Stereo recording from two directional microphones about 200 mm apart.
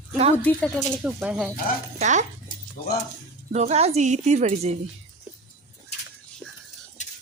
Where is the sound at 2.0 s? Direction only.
35° right (ahead or behind).